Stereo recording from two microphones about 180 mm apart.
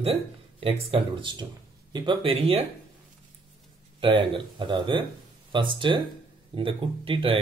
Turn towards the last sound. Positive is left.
turn(degrees=-30)  # may be behind; listen again after turning